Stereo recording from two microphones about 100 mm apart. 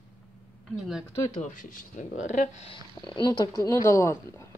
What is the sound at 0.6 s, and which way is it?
Speech, centre (ahead or behind).